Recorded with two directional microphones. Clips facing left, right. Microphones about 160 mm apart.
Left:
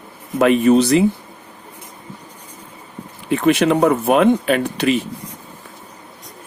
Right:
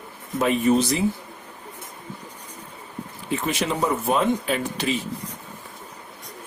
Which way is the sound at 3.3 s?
65° left (ahead or behind).